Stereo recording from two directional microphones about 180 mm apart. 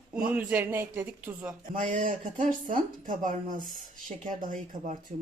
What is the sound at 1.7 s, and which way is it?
Speech, 50° right (ahead or behind).